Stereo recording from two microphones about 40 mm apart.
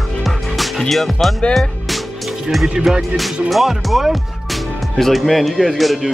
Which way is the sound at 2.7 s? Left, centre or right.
Centre.